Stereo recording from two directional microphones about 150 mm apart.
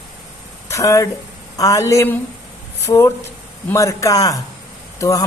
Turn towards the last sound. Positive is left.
turn(degrees=20)  # may be behind; listen again after turning